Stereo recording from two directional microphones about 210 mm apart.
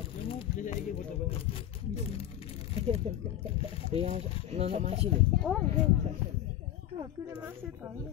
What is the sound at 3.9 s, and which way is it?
Speech, 30° right (ahead or behind).